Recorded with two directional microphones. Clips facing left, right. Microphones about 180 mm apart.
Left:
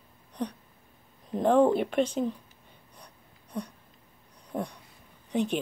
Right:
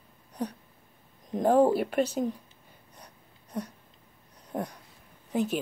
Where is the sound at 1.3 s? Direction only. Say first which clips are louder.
Even; 10° right (ahead or behind).